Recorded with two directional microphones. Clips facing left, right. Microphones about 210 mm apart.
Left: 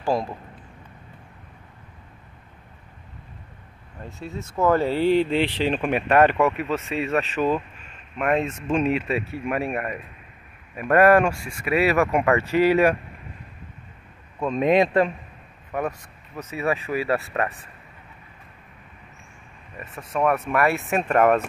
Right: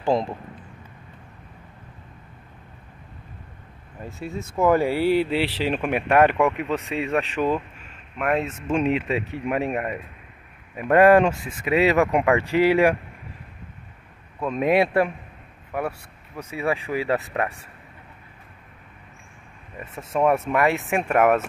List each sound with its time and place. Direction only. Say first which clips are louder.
0.0 s speech: right 2 dB; 20° right (ahead or behind)
4.0 s speech: right 2 dB; 10° right (ahead or behind)
8.2 s speech: left 1 dB; 5° right (ahead or behind)
14.4 s speech: left 1 dB; 5° right (ahead or behind)
19.8 s speech: right 2 dB; 25° right (ahead or behind); by 21.5 s 10° right (ahead or behind)